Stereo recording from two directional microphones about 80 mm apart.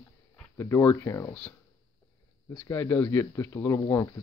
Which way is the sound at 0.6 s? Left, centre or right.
Left.